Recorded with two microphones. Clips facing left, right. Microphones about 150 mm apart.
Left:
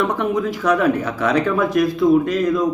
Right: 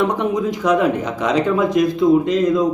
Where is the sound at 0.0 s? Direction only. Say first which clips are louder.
Right 1 dB; 20° right (ahead or behind).